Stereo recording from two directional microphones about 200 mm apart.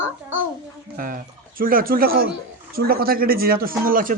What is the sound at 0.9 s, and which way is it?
Speech, 45° right (ahead or behind).